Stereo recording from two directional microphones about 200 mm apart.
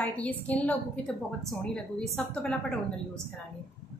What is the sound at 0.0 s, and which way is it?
A woman's voice, 5° left (ahead or behind).